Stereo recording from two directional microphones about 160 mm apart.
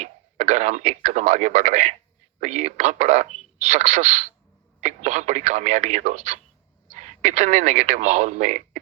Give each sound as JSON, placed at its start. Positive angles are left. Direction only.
{"t": 0.0, "sound": "a man's voice", "side_deg": -45}